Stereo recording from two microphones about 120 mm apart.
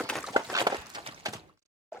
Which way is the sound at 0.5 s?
30° right (ahead or behind).